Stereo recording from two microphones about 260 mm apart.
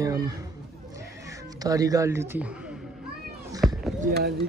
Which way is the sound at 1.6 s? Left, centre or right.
Centre.